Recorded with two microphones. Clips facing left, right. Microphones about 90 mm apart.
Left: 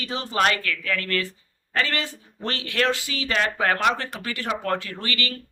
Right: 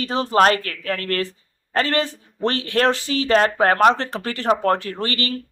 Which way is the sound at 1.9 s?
25° right (ahead or behind).